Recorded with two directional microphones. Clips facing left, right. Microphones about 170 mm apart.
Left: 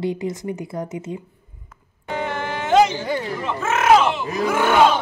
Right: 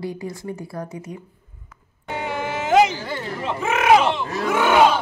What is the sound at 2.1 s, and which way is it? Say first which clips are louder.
Music: even; 10° right (ahead or behind).